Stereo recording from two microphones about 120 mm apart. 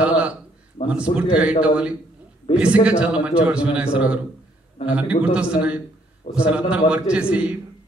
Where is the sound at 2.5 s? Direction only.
60° left (ahead or behind).